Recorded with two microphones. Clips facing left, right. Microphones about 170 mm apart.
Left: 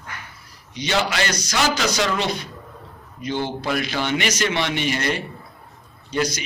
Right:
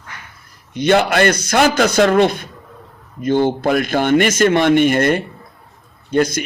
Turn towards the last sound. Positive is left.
turn(degrees=-55)  # may be behind; listen again after turning